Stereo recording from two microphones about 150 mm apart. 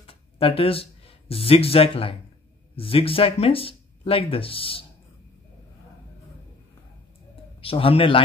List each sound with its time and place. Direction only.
0.0 s speech: 40° left (ahead or behind)
7.6 s speech: 40° left (ahead or behind)